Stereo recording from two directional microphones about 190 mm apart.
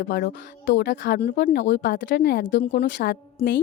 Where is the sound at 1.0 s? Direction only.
60° left (ahead or behind).